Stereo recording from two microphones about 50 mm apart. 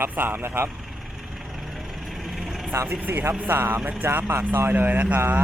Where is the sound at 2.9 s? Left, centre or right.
Right.